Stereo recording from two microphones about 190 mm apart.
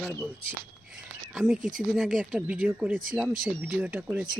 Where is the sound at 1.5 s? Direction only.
45° right (ahead or behind).